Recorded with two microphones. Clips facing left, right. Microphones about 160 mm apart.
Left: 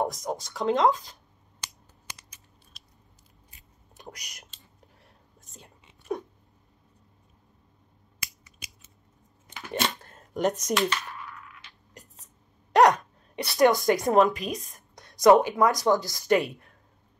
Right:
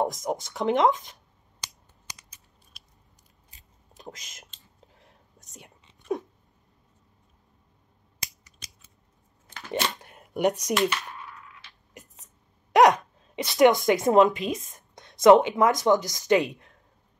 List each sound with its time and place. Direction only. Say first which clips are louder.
0.0 s speech: right 2 dB; 20° right (ahead or behind)
3.9 s speech: right 2 dB; 25° right (ahead or behind)
4.7 s whispering: right 1 dB; 20° right (ahead or behind)
9.7 s shuffling cards: right 1 dB; 15° right (ahead or behind)
12.7 s speech: right 1 dB; 20° right (ahead or behind)